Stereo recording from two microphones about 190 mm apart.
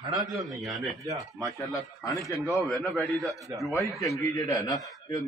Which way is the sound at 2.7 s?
Centre (ahead or behind).